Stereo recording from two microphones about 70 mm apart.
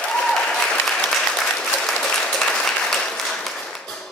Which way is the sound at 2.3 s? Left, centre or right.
Centre.